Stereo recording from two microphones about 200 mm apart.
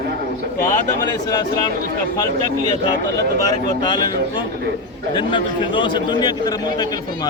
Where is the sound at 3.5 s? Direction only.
20° left (ahead or behind).